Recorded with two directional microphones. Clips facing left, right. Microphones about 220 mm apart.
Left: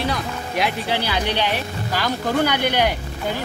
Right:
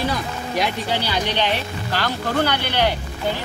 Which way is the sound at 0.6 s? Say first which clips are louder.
Even; 5° left (ahead or behind).